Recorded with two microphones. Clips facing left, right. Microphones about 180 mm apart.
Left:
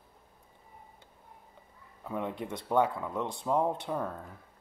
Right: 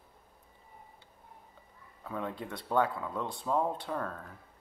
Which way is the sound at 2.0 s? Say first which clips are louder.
Left 2 dB; 15° left (ahead or behind).